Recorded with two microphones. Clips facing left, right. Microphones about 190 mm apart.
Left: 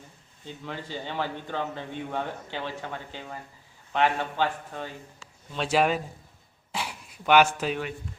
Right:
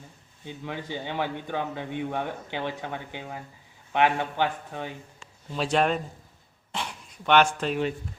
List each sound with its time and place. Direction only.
0.4 s a man's voice: 15° right (ahead or behind)
5.5 s a man's voice: 5° left (ahead or behind)